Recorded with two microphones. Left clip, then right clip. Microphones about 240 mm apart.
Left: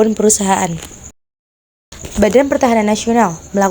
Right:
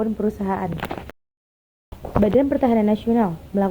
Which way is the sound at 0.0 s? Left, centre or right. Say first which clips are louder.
Left 11 dB; left.